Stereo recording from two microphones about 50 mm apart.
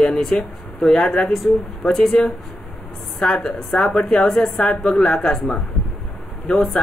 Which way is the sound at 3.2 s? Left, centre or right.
Centre.